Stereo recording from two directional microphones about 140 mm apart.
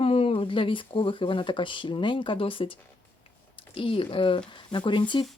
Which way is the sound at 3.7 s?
40° left (ahead or behind).